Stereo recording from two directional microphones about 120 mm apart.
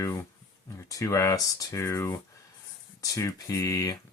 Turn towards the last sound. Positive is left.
turn(degrees=30)  # may be behind; listen again after turning